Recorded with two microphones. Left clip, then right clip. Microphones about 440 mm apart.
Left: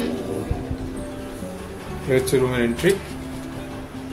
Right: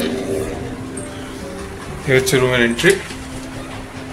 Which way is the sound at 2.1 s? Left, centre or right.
Left.